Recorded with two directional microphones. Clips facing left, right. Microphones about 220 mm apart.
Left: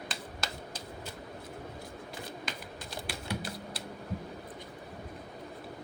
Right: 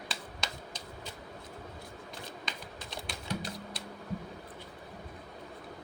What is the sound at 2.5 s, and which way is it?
Typing, 5° left (ahead or behind).